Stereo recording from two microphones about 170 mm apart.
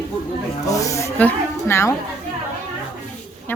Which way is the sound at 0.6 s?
20° left (ahead or behind).